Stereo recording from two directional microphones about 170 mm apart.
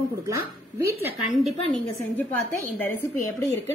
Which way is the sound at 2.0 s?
15° left (ahead or behind).